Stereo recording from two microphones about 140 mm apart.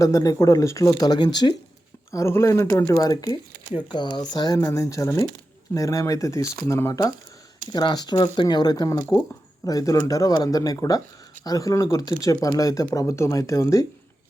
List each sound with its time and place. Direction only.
0.0 s speech: 25° left (ahead or behind)
2.0 s speech: 20° left (ahead or behind)
7.7 s speech: 30° left (ahead or behind)